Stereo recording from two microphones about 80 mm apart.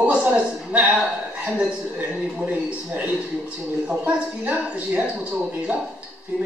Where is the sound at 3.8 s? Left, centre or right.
Centre.